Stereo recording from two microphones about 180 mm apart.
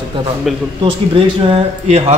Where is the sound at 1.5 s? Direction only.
35° right (ahead or behind).